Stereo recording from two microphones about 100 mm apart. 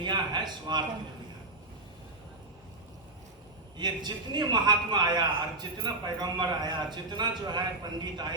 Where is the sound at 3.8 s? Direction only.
45° right (ahead or behind).